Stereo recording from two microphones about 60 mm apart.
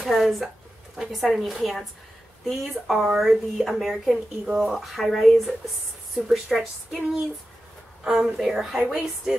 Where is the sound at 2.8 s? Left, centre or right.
Right.